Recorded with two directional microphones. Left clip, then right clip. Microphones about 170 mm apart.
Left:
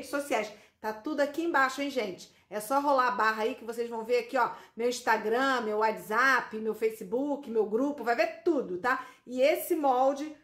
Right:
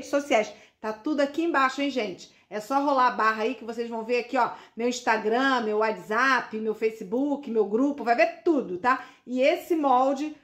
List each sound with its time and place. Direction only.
0.1 s a woman's voice: 45° right (ahead or behind)
0.8 s speech: 25° right (ahead or behind)